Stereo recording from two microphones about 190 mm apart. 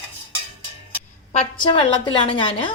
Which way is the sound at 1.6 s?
25° left (ahead or behind).